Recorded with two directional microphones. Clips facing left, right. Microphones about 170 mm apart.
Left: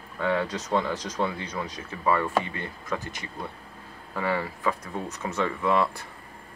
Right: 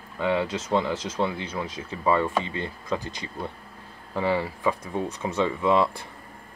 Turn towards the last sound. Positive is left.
turn(degrees=-20)  # may be behind; listen again after turning